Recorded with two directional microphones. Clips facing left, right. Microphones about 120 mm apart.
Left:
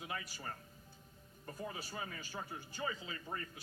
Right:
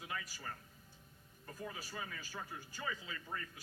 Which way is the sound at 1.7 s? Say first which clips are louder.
Left 1 dB; 30° left (ahead or behind).